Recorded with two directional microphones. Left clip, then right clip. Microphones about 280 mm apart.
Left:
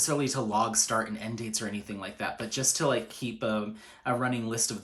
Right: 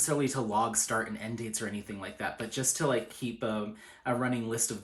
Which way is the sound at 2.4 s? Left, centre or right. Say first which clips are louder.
Left 3 dB; centre.